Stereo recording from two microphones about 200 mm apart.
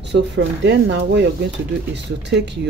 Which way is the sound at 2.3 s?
60° right (ahead or behind).